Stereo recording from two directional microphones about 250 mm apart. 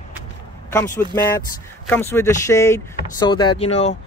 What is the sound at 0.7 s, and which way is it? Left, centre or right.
A man's voice, centre.